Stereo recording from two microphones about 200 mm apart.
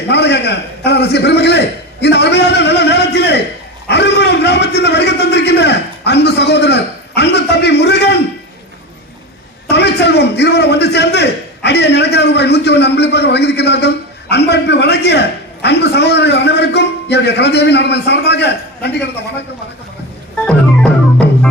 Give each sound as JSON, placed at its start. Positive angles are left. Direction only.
{"t": 0.1, "sound": "a man's voice", "side_deg": 60}
{"t": 9.6, "sound": "a man's voice", "side_deg": 60}
{"t": 20.4, "sound": "organ", "side_deg": 5}